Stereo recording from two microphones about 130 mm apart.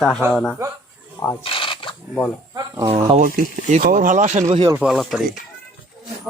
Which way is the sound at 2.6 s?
25° right (ahead or behind).